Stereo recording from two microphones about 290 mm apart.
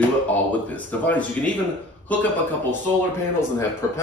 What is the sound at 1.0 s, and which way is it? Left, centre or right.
Speech, centre.